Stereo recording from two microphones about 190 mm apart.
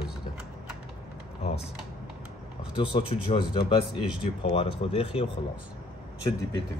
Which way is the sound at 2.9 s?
30° left (ahead or behind).